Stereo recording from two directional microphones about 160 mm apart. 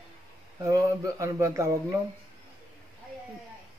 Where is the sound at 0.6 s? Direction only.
20° right (ahead or behind).